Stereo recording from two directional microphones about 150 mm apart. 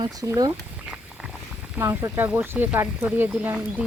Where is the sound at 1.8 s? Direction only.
15° right (ahead or behind).